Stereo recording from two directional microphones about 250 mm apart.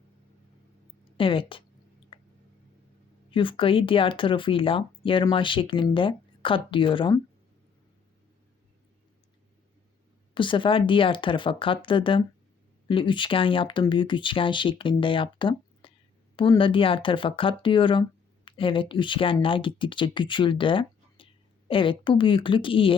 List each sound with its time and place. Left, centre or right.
1.1 s a woman's voice: left
2.1 s a sound: left
3.3 s speech: left
10.3 s speech: centre